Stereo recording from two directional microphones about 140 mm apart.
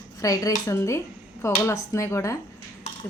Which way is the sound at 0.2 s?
25° left (ahead or behind).